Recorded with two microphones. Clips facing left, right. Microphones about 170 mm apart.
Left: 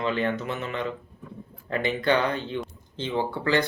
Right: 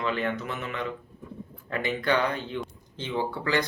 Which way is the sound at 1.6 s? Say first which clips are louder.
Left 3 dB; 25° left (ahead or behind).